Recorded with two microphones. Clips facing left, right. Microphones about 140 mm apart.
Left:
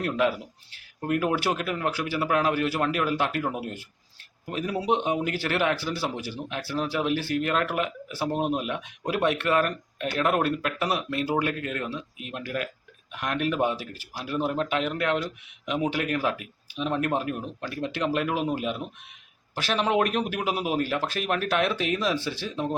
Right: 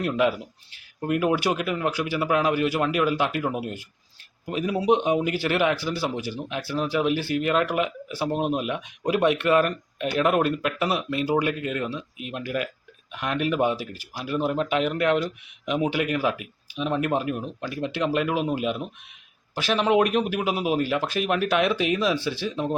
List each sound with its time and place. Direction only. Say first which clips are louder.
0.0 s speech: right 2 dB; 5° right (ahead or behind)